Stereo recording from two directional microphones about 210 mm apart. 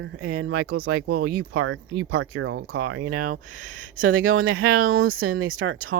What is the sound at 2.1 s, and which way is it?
Speech, 90° right.